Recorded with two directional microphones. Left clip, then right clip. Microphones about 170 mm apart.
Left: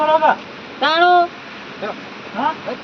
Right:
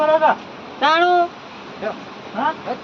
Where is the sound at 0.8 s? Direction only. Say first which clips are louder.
Left 2 dB; 5° left (ahead or behind).